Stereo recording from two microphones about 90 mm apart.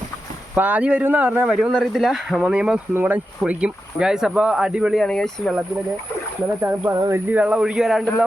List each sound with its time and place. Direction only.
0.5 s speech: 20° right (ahead or behind)
1.5 s speech: 5° right (ahead or behind)
5.0 s speech: 5° left (ahead or behind)
6.6 s speech: 20° right (ahead or behind); by 8.1 s 5° right (ahead or behind)